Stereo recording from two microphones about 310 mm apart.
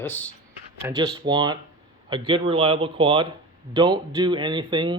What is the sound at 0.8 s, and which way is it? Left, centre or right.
Speech, centre.